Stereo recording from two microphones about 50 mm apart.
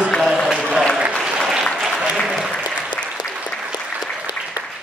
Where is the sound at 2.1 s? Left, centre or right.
Centre.